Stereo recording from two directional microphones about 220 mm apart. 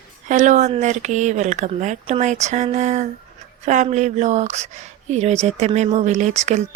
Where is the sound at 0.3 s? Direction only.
35° right (ahead or behind).